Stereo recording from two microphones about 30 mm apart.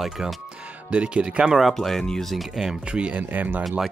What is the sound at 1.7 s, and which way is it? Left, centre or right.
Speech, centre.